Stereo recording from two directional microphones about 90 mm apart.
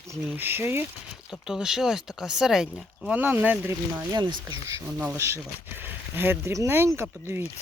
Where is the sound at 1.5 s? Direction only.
5° right (ahead or behind).